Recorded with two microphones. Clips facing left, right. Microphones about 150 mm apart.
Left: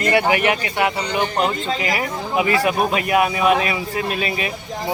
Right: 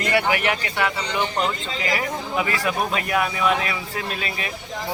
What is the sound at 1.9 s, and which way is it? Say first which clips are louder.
Speech: even; 15° left (ahead or behind).